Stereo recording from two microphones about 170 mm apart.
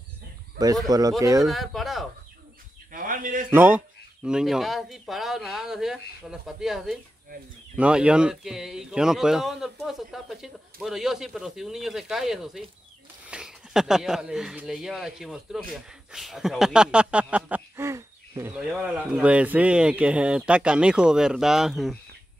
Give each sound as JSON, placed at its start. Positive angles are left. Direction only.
{"t": 0.8, "sound": "speech", "side_deg": -20}
{"t": 1.4, "sound": "speech", "side_deg": 0}
{"t": 2.9, "sound": "a sound", "side_deg": -55}
{"t": 3.5, "sound": "speech", "side_deg": -10}
{"t": 18.7, "sound": "speech", "side_deg": -5}